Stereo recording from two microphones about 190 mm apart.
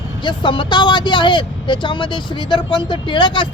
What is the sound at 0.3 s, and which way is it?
Speech, 25° left (ahead or behind).